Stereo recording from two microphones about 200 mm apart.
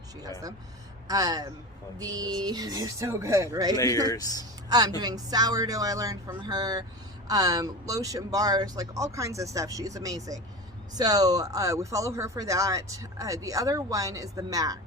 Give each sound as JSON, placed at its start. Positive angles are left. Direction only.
{"t": 0.2, "sound": "speech", "side_deg": -20}
{"t": 4.0, "sound": "speech", "side_deg": 15}
{"t": 4.9, "sound": "speech", "side_deg": -20}